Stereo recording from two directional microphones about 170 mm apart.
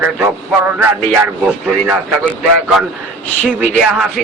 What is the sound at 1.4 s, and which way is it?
Speech, 5° right (ahead or behind).